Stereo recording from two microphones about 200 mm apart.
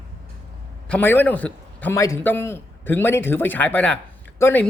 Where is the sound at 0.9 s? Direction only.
10° left (ahead or behind).